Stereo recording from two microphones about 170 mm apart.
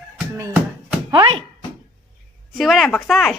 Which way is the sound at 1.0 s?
30° right (ahead or behind).